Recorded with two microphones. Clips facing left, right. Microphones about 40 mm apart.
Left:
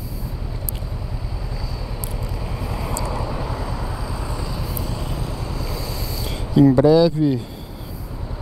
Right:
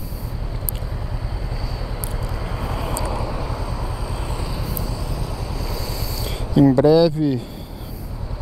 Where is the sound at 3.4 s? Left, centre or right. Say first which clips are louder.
Left 1 dB; left.